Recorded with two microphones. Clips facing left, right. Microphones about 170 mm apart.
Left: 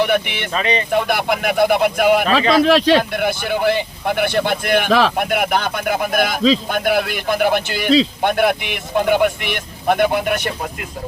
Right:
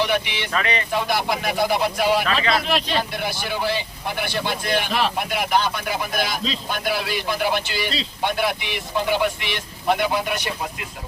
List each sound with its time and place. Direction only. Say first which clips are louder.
0.0 s speech: left 5 dB; 55° left (ahead or behind)
0.5 s speech: left 4 dB; 20° left (ahead or behind)
0.9 s speech: left 5 dB; 55° left (ahead or behind)
2.2 s speech: left 6 dB; 35° left (ahead or behind)
2.6 s speech: left 10 dB; 90° left
3.1 s speech: left 7 dB; 55° left (ahead or behind); by 5.1 s 90° left
5.1 s speech: left 4 dB; 55° left (ahead or behind)